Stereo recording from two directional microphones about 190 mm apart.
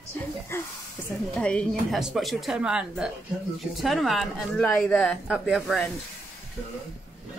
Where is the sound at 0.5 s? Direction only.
15° left (ahead or behind).